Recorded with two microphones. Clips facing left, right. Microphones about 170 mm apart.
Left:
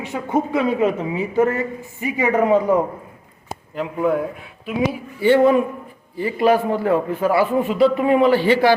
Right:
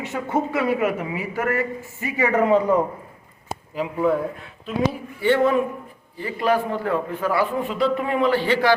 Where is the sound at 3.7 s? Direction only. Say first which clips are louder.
Left 1 dB; centre (ahead or behind).